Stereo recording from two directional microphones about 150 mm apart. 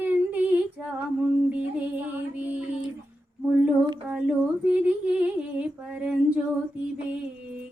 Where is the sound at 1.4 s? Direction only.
10° right (ahead or behind).